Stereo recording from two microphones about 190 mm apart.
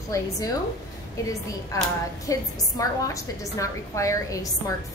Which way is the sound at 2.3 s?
15° left (ahead or behind).